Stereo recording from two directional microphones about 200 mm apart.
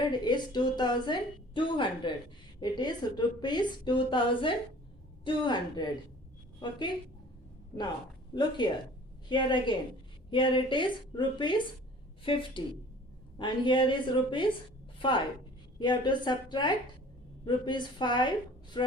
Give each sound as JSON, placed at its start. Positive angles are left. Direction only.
{"t": 0.0, "sound": "a woman's voice", "side_deg": 20}
{"t": 8.3, "sound": "a woman's voice", "side_deg": 20}
{"t": 14.9, "sound": "a sound", "side_deg": 25}
{"t": 15.8, "sound": "a woman's voice", "side_deg": 20}